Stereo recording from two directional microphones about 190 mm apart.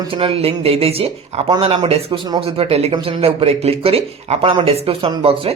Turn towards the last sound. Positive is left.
turn(degrees=-30)  # may be behind; listen again after turning